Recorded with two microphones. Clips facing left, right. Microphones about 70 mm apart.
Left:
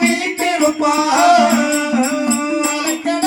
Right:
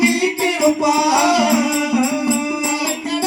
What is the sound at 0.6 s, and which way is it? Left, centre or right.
Music, left.